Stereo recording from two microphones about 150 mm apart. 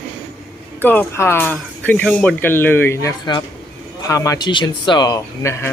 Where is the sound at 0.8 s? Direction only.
10° left (ahead or behind).